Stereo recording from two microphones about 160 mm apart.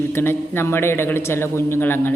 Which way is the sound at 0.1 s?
15° left (ahead or behind).